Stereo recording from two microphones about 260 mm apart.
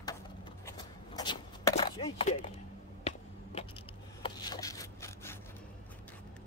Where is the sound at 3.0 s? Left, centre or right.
Left.